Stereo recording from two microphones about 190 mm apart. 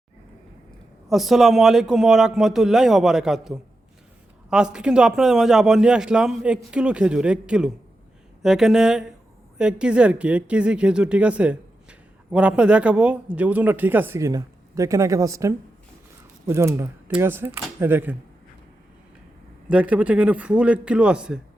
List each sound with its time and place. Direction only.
1.0 s a man's voice: centre (ahead or behind)
19.7 s speech: 5° right (ahead or behind)